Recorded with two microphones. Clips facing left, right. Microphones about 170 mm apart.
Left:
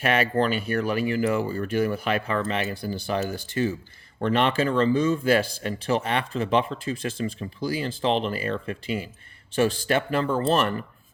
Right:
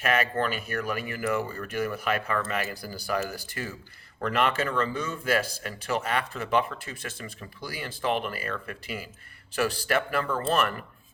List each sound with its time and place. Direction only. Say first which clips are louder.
0.0 s speech: left 4 dB; 30° left (ahead or behind)